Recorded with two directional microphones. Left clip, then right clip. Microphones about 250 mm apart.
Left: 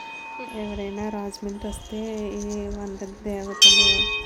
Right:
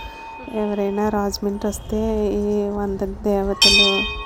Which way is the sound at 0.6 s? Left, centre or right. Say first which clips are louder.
Right 12 dB; centre.